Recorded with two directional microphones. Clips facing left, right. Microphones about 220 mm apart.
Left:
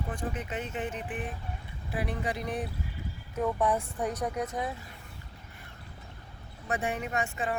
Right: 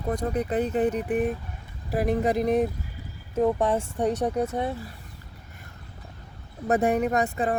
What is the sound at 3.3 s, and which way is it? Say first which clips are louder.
Speech: right 6 dB; 25° right (ahead or behind).